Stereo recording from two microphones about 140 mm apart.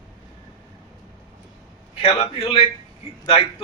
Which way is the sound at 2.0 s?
45° left (ahead or behind).